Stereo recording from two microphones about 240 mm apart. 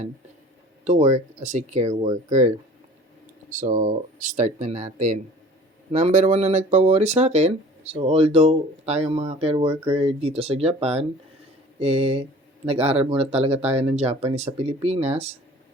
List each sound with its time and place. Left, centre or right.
0.9 s speech: right
3.5 s speech: right